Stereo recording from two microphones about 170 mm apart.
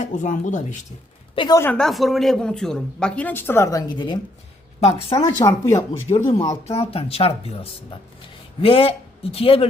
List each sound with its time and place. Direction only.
0.0 s speech: 45° left (ahead or behind)
1.4 s speech: 25° left (ahead or behind)
1.6 s speech: 5° left (ahead or behind); by 4.2 s 25° left (ahead or behind)
4.8 s a woman's voice: 35° left (ahead or behind)
5.1 s speech: 20° left (ahead or behind)
6.1 s a woman's voice: 40° left (ahead or behind)